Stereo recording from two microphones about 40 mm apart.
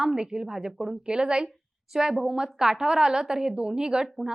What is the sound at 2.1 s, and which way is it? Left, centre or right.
A woman's voice, centre.